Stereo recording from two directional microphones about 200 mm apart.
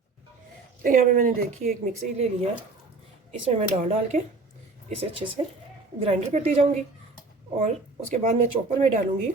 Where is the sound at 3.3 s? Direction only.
30° right (ahead or behind).